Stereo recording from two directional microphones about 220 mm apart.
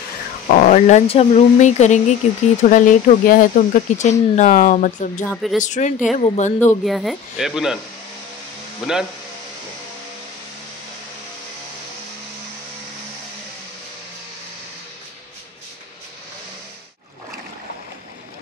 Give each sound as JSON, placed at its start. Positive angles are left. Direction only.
{"t": 0.5, "sound": "speech", "side_deg": 35}
{"t": 5.2, "sound": "speech", "side_deg": 5}
{"t": 5.6, "sound": "speech", "side_deg": 35}
{"t": 6.6, "sound": "speech", "side_deg": 5}
{"t": 8.8, "sound": "speech", "side_deg": 0}